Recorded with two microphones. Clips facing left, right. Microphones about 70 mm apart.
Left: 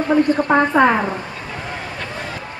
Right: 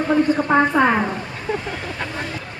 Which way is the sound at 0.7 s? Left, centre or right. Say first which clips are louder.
Left 5 dB; left.